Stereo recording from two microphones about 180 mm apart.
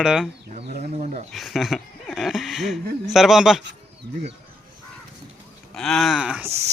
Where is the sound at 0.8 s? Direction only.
40° right (ahead or behind).